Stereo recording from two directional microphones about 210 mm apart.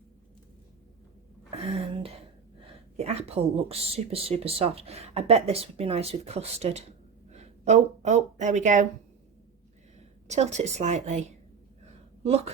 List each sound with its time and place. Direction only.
1.7 s a sound: 30° right (ahead or behind)
3.0 s speech: 30° right (ahead or behind)
10.2 s speech: 35° right (ahead or behind)